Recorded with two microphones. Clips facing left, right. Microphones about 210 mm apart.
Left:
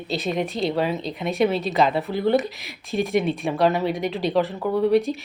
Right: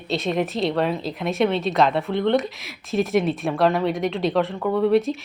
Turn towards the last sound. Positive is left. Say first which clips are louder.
# right 1 dB
turn(degrees=0)  # may be behind; listen again after turning